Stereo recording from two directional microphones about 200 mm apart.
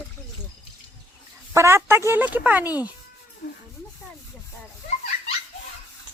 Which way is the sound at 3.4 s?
45° left (ahead or behind).